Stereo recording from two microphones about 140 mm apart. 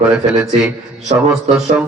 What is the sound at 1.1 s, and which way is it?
Speech, 45° right (ahead or behind).